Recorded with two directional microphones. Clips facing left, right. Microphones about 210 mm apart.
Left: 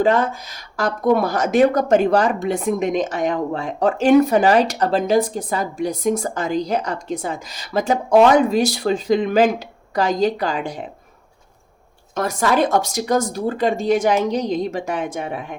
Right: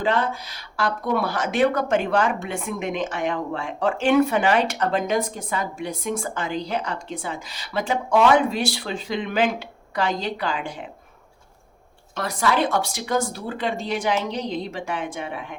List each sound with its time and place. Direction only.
0.0 s speech: 45° left (ahead or behind)
12.1 s speech: 45° left (ahead or behind)